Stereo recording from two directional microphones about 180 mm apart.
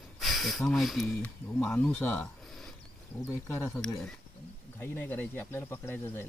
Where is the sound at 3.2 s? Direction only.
15° left (ahead or behind).